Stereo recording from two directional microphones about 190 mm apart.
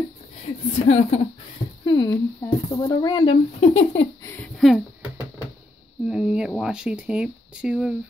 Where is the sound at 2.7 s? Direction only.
20° left (ahead or behind).